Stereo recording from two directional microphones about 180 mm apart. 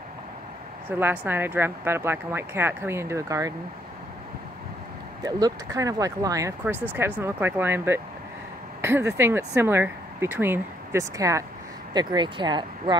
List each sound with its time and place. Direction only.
0.8 s speech: 10° right (ahead or behind)
5.2 s speech: 20° right (ahead or behind)